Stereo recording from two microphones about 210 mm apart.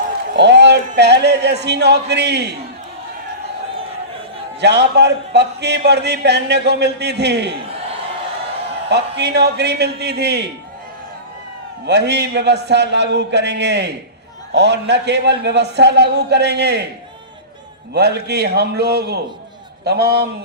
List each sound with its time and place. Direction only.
0.3 s speech: 55° right (ahead or behind)
4.6 s speech: 55° right (ahead or behind)
8.9 s speech: 55° right (ahead or behind)
11.9 s a man's voice: 55° right (ahead or behind)
17.9 s speech: 50° right (ahead or behind)